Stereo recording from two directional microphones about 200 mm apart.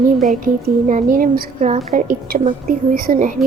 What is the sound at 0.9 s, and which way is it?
A woman's voice, 40° right (ahead or behind).